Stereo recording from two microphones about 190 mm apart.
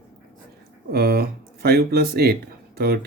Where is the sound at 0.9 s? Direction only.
55° right (ahead or behind).